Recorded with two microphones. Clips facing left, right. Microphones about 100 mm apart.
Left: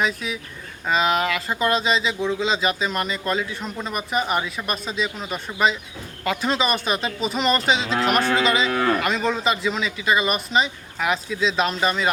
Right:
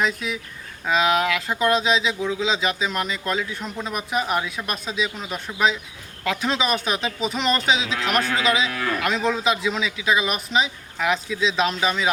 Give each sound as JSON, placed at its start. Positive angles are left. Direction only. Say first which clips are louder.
{"t": 0.0, "sound": "speech", "louder": "even", "side_deg": 0}
{"t": 8.7, "sound": "cattle", "louder": "left 5 dB", "side_deg": 35}
{"t": 9.0, "sound": "speech", "louder": "even", "side_deg": 0}